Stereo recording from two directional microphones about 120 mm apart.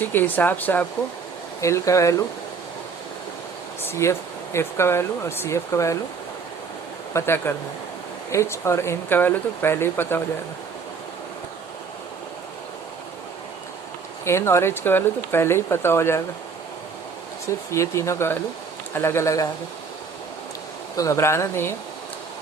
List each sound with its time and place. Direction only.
0.0 s speech: 15° left (ahead or behind)
1.6 s speech: 25° left (ahead or behind)
3.8 s speech: 25° left (ahead or behind)
7.1 s speech: 20° left (ahead or behind)
14.3 s speech: 20° left (ahead or behind)
17.4 s speech: 25° left (ahead or behind)
20.9 s speech: 25° left (ahead or behind)